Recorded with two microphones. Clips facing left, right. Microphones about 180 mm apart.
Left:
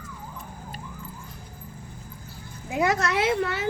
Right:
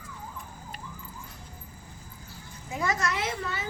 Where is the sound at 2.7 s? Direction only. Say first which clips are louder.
Left 6 dB; 70° left (ahead or behind).